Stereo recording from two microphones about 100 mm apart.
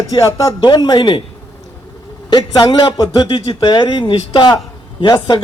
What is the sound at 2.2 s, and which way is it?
A man's voice, 45° left (ahead or behind).